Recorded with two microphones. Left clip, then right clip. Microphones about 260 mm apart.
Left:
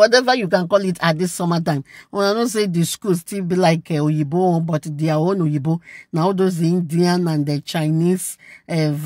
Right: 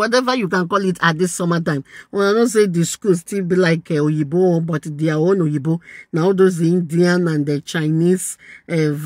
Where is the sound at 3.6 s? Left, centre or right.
Left.